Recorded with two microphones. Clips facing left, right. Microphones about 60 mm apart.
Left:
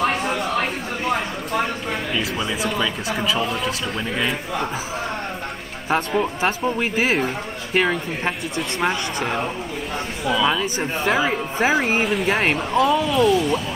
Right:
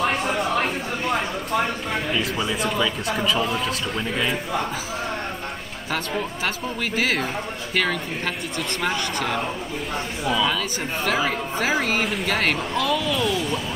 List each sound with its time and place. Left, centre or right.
0.0 s chatter: centre
1.9 s speech: centre
5.9 s speech: left
12.0 s speech: centre
12.3 s speech: left
13.2 s speech: centre